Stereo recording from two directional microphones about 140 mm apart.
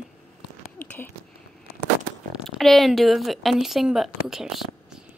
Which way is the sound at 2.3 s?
Centre (ahead or behind).